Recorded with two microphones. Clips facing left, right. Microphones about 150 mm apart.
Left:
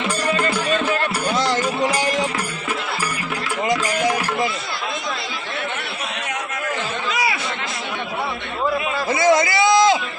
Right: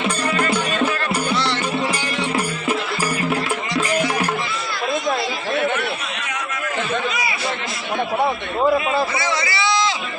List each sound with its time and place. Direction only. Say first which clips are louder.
1.3 s music: left 4 dB; 45° left (ahead or behind)
3.7 s music: left 2 dB; 50° left (ahead or behind)
7.1 s chatter: left 3 dB; 90° left
9.1 s a sound: left 7 dB; 50° left (ahead or behind)